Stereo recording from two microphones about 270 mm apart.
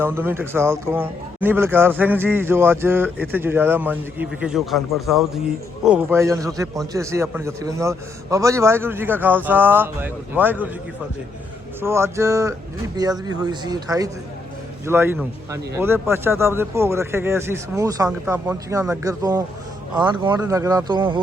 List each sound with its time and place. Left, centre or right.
0.0 s a man's voice: centre
11.8 s a man's voice: centre